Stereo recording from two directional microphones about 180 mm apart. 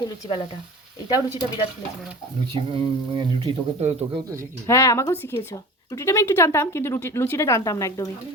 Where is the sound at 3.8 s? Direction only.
35° right (ahead or behind).